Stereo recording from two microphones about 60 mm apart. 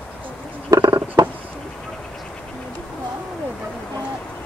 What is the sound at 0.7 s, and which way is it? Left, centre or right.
Insect, right.